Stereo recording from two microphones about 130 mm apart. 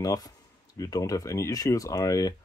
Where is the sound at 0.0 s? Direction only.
25° left (ahead or behind).